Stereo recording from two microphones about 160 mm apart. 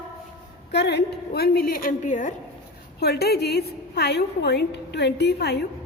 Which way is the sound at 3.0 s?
80° left.